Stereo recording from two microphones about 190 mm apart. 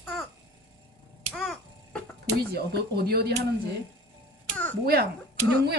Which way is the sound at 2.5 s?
55° right (ahead or behind).